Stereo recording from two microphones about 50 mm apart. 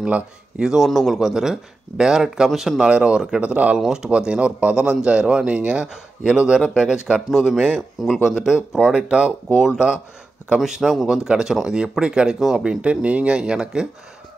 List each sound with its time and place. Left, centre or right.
0.0 s speech: centre
0.7 s speech: centre
2.8 s speech: right
3.8 s speech: centre
10.6 s speech: centre
11.1 s speech: centre
12.8 s speech: right